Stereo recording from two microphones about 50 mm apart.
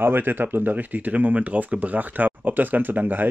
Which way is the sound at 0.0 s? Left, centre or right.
Right.